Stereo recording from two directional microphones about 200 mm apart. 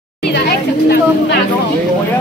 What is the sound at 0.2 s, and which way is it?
Speech, 55° left (ahead or behind).